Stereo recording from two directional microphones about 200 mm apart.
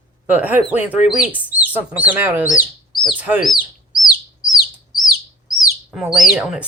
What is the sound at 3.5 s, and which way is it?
Bird, 20° left (ahead or behind).